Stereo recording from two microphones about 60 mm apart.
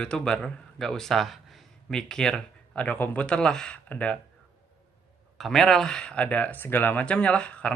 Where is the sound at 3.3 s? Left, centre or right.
Centre.